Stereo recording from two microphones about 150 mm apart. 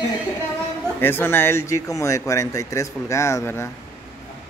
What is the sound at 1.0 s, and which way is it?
Speech, 15° left (ahead or behind).